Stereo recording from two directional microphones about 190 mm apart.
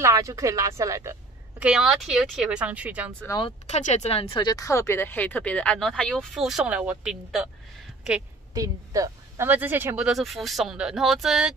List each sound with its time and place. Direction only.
0.0 s speech: 15° right (ahead or behind)
1.6 s speech: 5° right (ahead or behind)
3.3 s speech: 25° left (ahead or behind)
3.6 s speech: 35° left (ahead or behind); by 7.4 s centre (ahead or behind)
8.5 s speech: 20° right (ahead or behind); by 11.5 s centre (ahead or behind)